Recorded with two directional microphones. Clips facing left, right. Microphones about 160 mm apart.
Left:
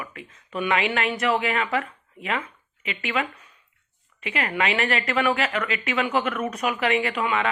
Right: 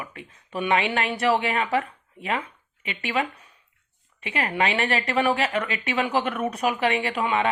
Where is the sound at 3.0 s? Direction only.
35° right (ahead or behind).